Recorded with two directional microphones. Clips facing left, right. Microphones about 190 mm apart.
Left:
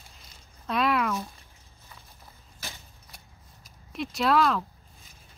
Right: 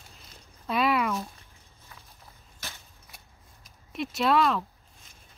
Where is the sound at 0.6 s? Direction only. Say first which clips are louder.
Even; centre (ahead or behind).